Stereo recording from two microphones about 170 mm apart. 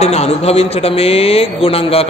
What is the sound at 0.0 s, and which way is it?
A man's voice, 40° left (ahead or behind).